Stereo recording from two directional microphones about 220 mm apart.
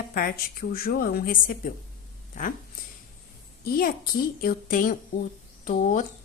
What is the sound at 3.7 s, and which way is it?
A woman's voice, 40° left (ahead or behind).